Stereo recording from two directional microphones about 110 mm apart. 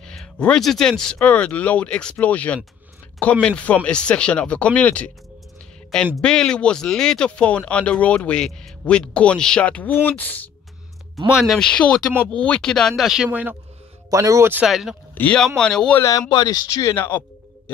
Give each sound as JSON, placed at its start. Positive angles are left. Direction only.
{"t": 0.0, "sound": "speech", "side_deg": 5}
{"t": 6.1, "sound": "speech", "side_deg": 5}
{"t": 11.2, "sound": "speech", "side_deg": -5}
{"t": 11.5, "sound": "speech", "side_deg": 5}
{"t": 14.1, "sound": "speech", "side_deg": -30}
{"t": 14.7, "sound": "speech", "side_deg": -5}
{"t": 15.1, "sound": "speech", "side_deg": 10}
{"t": 16.0, "sound": "speech", "side_deg": 35}
{"t": 16.9, "sound": "speech", "side_deg": 20}